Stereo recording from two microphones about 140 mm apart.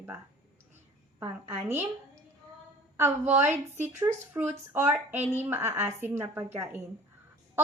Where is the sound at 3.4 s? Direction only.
15° right (ahead or behind).